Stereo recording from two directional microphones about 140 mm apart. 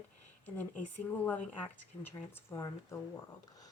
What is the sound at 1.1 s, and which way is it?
Speech, 10° left (ahead or behind).